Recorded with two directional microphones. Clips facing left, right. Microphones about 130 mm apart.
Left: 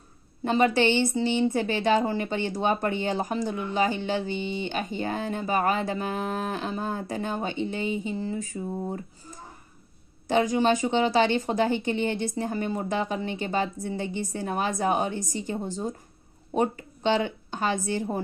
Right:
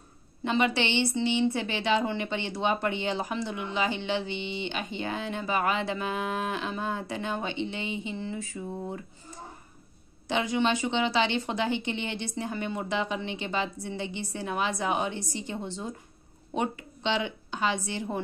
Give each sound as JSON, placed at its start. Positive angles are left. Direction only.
{"t": 0.4, "sound": "a woman's voice", "side_deg": 45}
{"t": 10.2, "sound": "a woman's voice", "side_deg": 45}